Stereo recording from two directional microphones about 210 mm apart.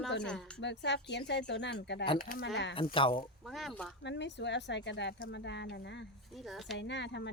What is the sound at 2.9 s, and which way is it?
Speech, 25° left (ahead or behind).